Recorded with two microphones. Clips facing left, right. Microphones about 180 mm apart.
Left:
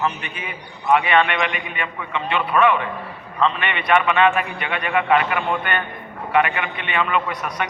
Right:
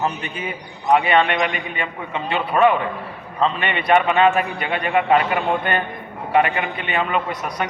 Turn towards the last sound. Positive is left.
turn(degrees=-35)  # may be behind; listen again after turning